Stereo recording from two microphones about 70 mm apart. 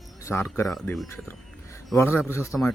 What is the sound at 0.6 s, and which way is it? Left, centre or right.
Speech, left.